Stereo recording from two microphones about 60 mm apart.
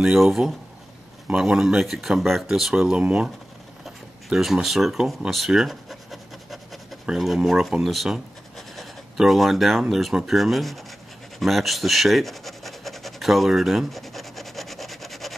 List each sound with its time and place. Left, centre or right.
0.0 s speech: centre
3.8 s a sound: centre
7.3 s speech: centre
11.3 s rub: centre